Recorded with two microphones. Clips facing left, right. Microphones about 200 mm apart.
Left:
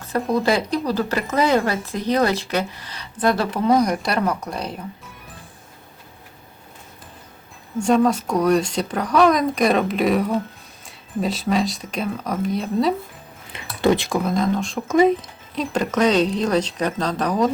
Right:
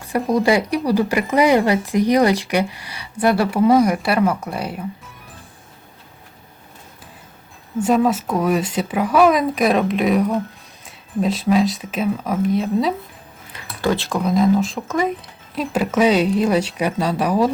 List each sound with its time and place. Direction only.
0.3 s speech: 15° right (ahead or behind)
7.8 s speech: 5° right (ahead or behind)
13.5 s a sound: 20° left (ahead or behind)
14.2 s speech: centre (ahead or behind)
14.8 s speech: 25° left (ahead or behind)
15.5 s speech: 5° right (ahead or behind)